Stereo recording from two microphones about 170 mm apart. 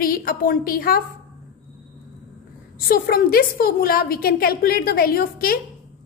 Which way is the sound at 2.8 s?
60° left (ahead or behind).